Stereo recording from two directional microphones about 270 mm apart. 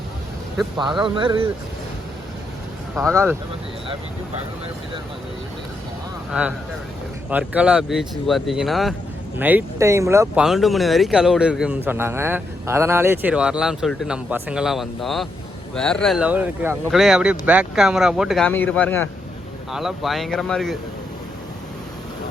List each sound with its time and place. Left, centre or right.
0.8 s speech: centre
3.0 s speech: centre
7.3 s speech: centre